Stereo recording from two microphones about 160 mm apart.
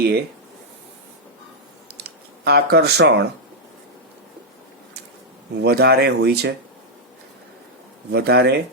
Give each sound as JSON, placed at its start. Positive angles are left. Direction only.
{"t": 2.0, "sound": "speech", "side_deg": -90}
{"t": 5.5, "sound": "speech", "side_deg": -90}
{"t": 8.1, "sound": "speech", "side_deg": -90}